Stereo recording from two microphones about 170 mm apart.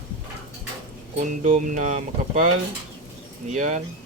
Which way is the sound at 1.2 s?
50° right (ahead or behind).